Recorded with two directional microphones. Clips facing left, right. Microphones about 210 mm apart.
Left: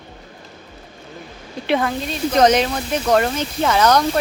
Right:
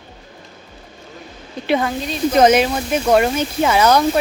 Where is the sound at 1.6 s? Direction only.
Centre (ahead or behind).